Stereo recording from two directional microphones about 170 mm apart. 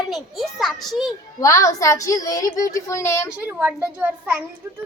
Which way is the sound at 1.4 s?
20° left (ahead or behind).